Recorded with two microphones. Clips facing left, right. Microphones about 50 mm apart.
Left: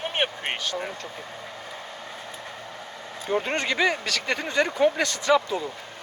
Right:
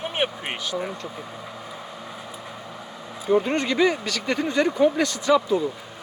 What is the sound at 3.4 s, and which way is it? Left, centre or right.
Speech, left.